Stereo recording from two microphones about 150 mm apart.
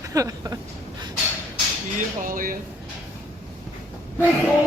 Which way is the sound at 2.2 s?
65° right (ahead or behind).